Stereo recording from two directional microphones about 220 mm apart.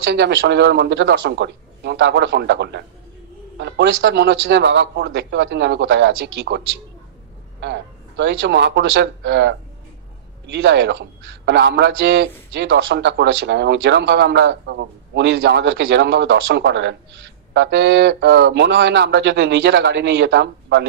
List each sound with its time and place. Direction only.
0.1 s a man's voice: 50° right (ahead or behind)
7.6 s a man's voice: 55° right (ahead or behind)